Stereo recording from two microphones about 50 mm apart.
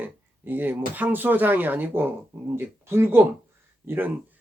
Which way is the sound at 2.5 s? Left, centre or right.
Right.